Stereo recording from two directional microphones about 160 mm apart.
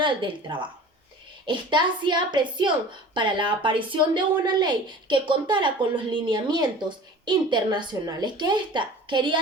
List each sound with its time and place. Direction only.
0.0 s a woman's voice: 30° right (ahead or behind)